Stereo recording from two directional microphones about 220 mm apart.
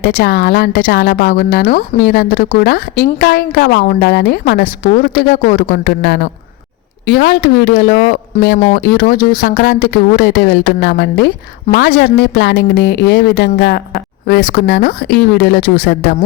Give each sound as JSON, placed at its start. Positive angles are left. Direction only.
{"t": 0.0, "sound": "speech", "side_deg": 45}